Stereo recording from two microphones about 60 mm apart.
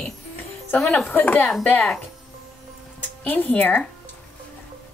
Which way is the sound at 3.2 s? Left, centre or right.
Left.